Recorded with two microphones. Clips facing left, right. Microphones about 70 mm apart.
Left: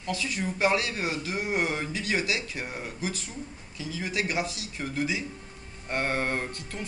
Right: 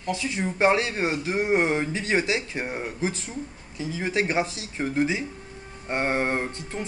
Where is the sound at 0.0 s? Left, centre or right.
Right.